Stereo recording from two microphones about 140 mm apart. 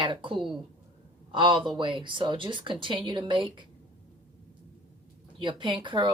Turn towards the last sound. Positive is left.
turn(degrees=-35)  # may be behind; listen again after turning